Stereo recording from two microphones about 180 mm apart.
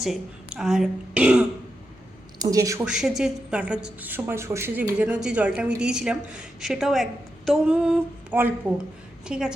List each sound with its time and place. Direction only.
0.0 s a woman's voice: centre (ahead or behind)
2.4 s a woman's voice: 20° right (ahead or behind)
2.8 s a woman's voice: 5° right (ahead or behind)